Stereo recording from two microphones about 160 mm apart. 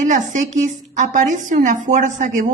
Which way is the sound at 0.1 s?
50° right (ahead or behind).